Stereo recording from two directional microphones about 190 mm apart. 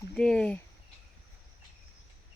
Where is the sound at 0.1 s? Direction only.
5° left (ahead or behind).